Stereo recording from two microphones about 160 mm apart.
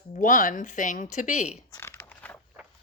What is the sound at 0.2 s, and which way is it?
Speech, 55° left (ahead or behind).